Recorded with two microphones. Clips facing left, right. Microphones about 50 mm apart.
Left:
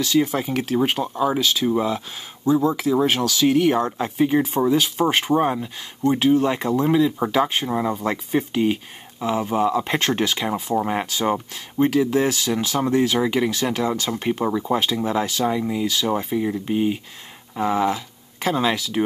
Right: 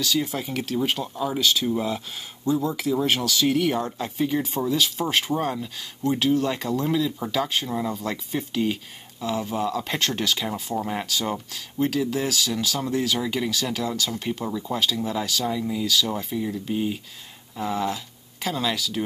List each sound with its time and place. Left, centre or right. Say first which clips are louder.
0.0 s speech: left 6 dB; centre